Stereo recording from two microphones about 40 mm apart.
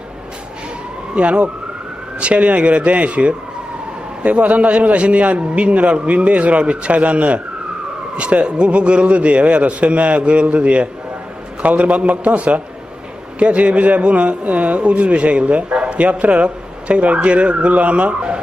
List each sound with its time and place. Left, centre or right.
1.1 s a man's voice: right